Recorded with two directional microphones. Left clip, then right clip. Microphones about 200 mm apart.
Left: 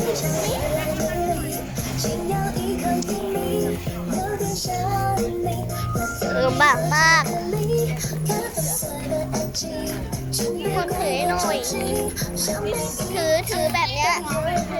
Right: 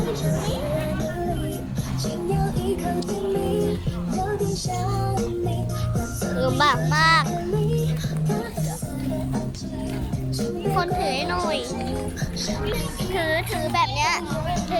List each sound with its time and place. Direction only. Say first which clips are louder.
4.8 s music: left 6 dB; 15° left (ahead or behind)
6.4 s music: left 3 dB; 5° right (ahead or behind)
10.4 s music: left 2 dB; 45° left (ahead or behind)
10.8 s music: right 1 dB; 10° right (ahead or behind)
13.1 s music: left 3 dB; 5° left (ahead or behind)
13.6 s children playing: left 1 dB; 10° right (ahead or behind)